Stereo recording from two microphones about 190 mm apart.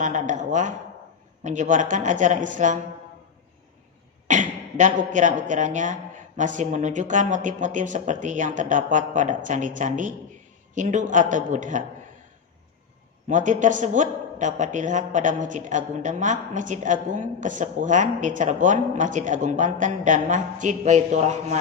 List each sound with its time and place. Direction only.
0.0 s a woman's voice: 40° right (ahead or behind)
4.3 s a woman's voice: 40° right (ahead or behind)
13.2 s a woman's voice: 40° right (ahead or behind)